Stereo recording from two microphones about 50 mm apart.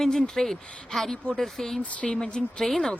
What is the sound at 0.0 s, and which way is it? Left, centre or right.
Speech, centre.